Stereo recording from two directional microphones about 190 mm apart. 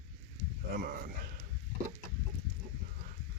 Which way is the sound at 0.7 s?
50° right (ahead or behind).